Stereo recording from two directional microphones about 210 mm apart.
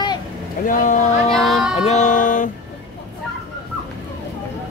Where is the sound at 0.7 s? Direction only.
35° left (ahead or behind).